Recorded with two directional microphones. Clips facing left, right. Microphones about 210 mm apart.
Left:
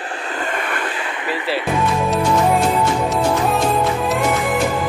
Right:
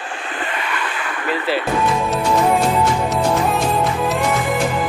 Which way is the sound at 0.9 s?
25° left (ahead or behind).